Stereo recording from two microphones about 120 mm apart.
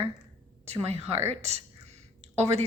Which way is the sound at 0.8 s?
60° right (ahead or behind).